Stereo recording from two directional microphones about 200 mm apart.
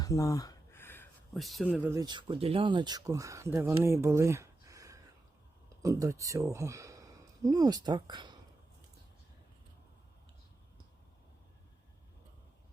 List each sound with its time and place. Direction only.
0.0 s a sound: 15° left (ahead or behind)
1.4 s speech: centre (ahead or behind)
2.0 s speech: 20° right (ahead or behind)